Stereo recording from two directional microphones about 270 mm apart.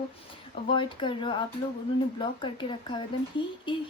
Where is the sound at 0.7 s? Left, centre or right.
Centre.